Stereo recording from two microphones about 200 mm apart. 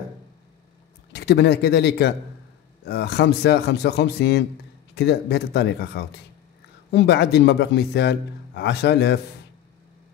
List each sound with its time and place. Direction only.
1.1 s a man's voice: 55° left (ahead or behind)